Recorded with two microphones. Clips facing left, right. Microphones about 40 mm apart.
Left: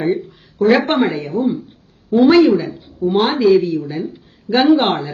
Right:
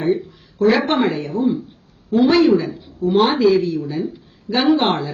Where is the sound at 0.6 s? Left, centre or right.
Centre.